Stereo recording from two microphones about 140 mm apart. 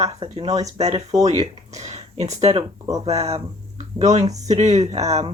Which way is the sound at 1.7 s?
55° right (ahead or behind).